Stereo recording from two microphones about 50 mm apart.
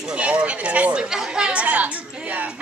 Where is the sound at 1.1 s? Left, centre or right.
Centre; by 2.5 s right.